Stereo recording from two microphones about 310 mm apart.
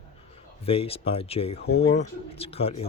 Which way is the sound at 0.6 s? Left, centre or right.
Centre.